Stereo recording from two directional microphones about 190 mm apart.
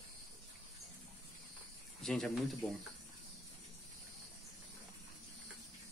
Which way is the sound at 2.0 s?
Centre (ahead or behind).